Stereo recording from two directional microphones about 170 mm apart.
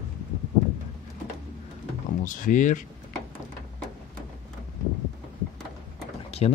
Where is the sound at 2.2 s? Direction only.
50° left (ahead or behind).